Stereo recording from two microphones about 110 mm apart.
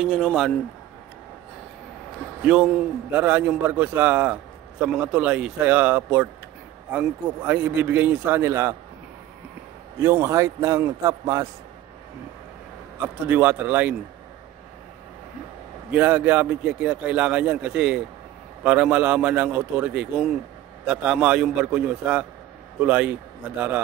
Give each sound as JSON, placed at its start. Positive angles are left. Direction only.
{"t": 0.0, "sound": "a man's voice", "side_deg": 5}
{"t": 2.4, "sound": "a man's voice", "side_deg": -10}
{"t": 10.0, "sound": "a man's voice", "side_deg": -25}
{"t": 13.0, "sound": "a man's voice", "side_deg": -15}
{"t": 15.9, "sound": "a man's voice", "side_deg": -10}